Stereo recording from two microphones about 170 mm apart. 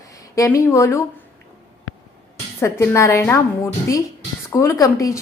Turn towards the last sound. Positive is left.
turn(degrees=20)  # may be behind; listen again after turning